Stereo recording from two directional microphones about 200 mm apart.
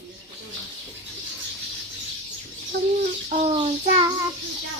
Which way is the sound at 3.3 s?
40° right (ahead or behind).